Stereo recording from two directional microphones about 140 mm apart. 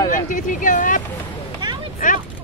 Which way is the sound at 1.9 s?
70° left (ahead or behind).